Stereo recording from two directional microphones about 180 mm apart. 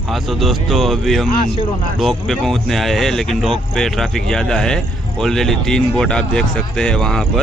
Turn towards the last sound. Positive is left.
turn(degrees=5)  # may be behind; listen again after turning